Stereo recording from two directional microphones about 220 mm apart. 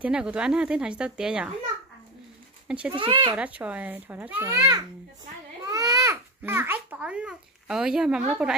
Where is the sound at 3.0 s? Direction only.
20° right (ahead or behind).